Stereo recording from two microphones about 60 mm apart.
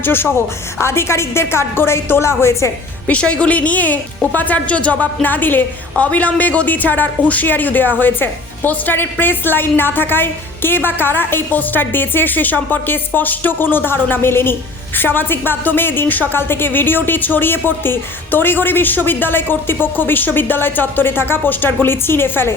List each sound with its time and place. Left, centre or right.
0.0 s a woman's voice: left
3.1 s a woman's voice: left